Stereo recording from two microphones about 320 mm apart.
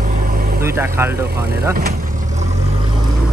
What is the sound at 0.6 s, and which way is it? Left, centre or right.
Speech, centre.